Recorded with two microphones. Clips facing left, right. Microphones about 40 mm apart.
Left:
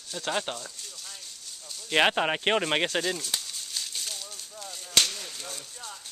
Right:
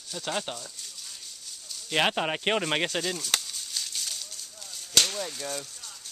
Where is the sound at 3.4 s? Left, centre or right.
Centre.